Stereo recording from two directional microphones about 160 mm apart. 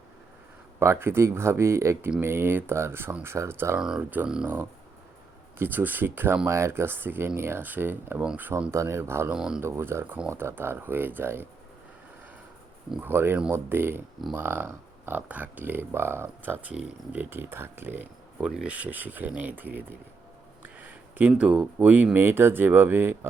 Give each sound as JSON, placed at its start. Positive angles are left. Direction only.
{"t": 0.8, "sound": "speech", "side_deg": -15}
{"t": 3.8, "sound": "speech", "side_deg": -5}
{"t": 9.3, "sound": "speech", "side_deg": -5}
{"t": 9.6, "sound": "speech", "side_deg": -15}
{"t": 13.0, "sound": "speech", "side_deg": -15}